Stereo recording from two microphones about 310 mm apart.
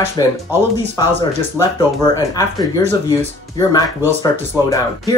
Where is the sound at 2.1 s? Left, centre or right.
Centre.